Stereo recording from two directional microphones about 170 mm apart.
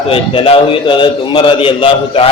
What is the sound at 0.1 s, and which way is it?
A man's voice, 35° left (ahead or behind).